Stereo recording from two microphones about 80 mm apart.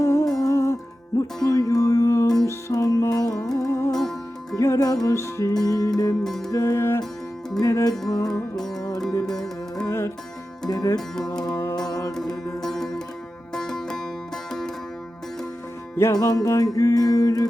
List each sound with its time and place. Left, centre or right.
0.0 s music: left
1.5 s music: left
4.8 s music: left
5.1 s music: left
5.6 s music: left
6.2 s music: centre
6.5 s music: left
7.9 s music: left
9.8 s music: left
10.7 s music: left
12.6 s music: centre
16.1 s music: left